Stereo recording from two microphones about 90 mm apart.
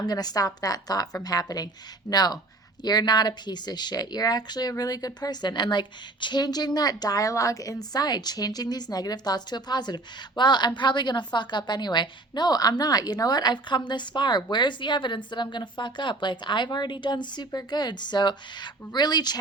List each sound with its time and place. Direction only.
0.0 s a woman's voice: 50° left (ahead or behind)